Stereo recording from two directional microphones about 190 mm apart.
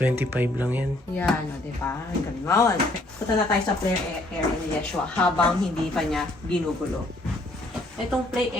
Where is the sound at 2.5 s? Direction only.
15° left (ahead or behind).